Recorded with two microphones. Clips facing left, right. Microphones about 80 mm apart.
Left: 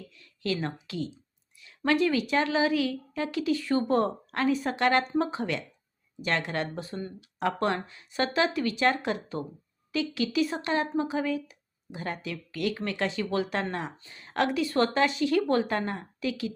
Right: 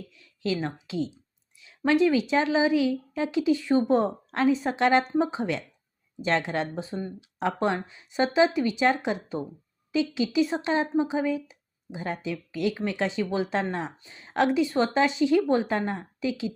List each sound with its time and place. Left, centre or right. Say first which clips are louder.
0.2 s speech: right 2 dB; right